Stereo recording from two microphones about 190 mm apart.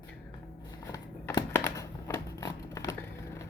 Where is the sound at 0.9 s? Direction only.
15° left (ahead or behind).